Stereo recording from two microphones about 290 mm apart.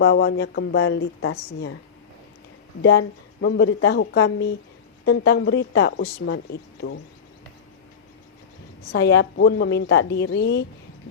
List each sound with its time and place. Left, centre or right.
0.0 s speech: left
2.8 s speech: left
8.9 s speech: left